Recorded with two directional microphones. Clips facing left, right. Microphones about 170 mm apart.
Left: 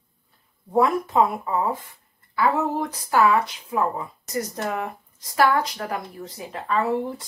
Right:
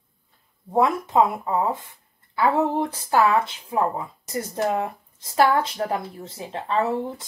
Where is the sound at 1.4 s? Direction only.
20° right (ahead or behind).